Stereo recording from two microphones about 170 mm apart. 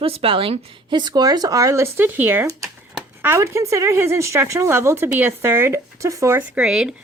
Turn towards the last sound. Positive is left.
turn(degrees=-5)  # may be behind; listen again after turning